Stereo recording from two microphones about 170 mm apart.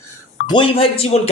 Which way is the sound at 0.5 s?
30° left (ahead or behind).